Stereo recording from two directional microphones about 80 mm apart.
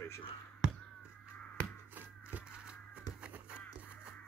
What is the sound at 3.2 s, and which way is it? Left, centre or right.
Music, centre.